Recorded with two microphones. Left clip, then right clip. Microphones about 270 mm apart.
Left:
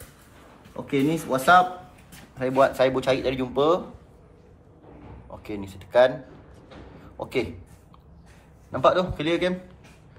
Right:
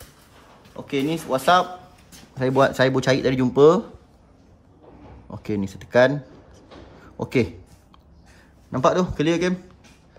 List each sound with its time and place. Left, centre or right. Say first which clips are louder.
0.7 s speech: even; centre
2.3 s speech: right 2 dB; right
5.4 s speech: right 8 dB; right
8.8 s a man's voice: right 1 dB; right